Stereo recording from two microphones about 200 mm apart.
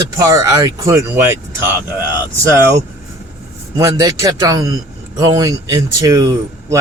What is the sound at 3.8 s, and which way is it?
Speech, 15° right (ahead or behind).